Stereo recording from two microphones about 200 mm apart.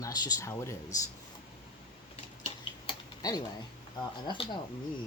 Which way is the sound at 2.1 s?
35° left (ahead or behind).